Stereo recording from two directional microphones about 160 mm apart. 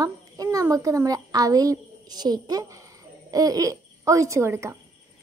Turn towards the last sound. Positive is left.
turn(degrees=-15)  # may be behind; listen again after turning